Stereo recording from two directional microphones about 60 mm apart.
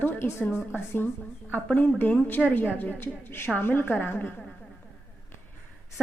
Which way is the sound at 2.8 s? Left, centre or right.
Left.